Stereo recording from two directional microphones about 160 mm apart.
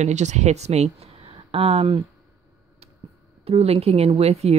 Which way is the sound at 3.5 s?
40° right (ahead or behind).